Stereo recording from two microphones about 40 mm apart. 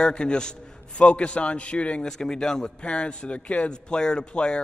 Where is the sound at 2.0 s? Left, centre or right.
Centre.